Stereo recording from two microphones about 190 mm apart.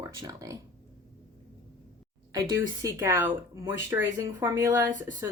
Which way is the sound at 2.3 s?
20° right (ahead or behind).